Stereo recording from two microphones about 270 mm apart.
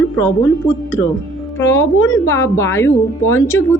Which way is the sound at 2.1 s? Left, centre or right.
Centre.